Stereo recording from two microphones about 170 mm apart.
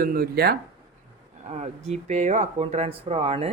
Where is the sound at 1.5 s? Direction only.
40° right (ahead or behind).